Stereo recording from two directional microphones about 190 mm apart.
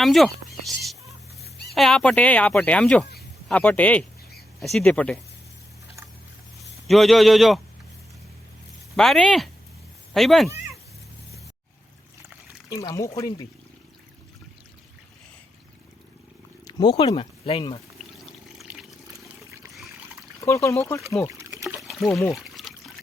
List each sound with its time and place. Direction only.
0.0 s a sound: centre (ahead or behind)
1.7 s speech: centre (ahead or behind)
3.2 s a sound: 10° left (ahead or behind)
4.6 s speech: centre (ahead or behind)
6.8 s speech: centre (ahead or behind)
9.0 s speech: centre (ahead or behind)
12.6 s speech: 20° left (ahead or behind)
16.6 s speech: 20° left (ahead or behind)
18.5 s water: centre (ahead or behind)
20.4 s speech: 15° left (ahead or behind)
21.3 s trickle: 15° right (ahead or behind)
21.8 s pour: centre (ahead or behind)
22.3 s trickle: centre (ahead or behind)